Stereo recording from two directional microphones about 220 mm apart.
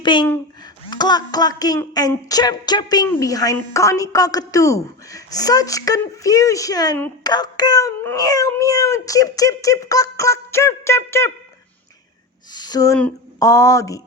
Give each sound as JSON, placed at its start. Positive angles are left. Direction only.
{"t": 0.0, "sound": "speech", "side_deg": 20}
{"t": 12.5, "sound": "speech", "side_deg": 15}